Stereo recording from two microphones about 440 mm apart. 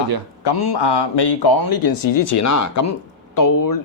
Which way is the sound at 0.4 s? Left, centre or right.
Left.